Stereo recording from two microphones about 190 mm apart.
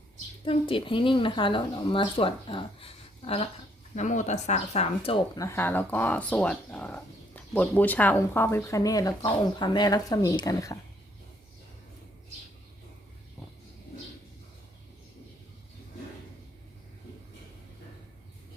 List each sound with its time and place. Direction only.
0.4 s speech: 30° left (ahead or behind)